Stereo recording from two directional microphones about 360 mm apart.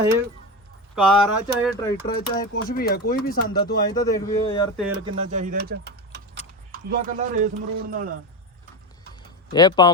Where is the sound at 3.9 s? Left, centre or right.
Centre.